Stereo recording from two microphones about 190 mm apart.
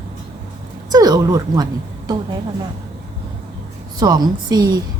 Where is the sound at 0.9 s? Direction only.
20° right (ahead or behind).